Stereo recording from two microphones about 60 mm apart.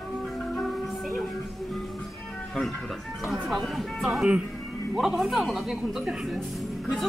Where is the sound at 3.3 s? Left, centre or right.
Centre.